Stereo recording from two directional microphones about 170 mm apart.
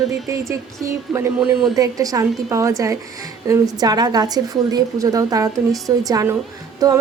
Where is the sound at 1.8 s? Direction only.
20° right (ahead or behind).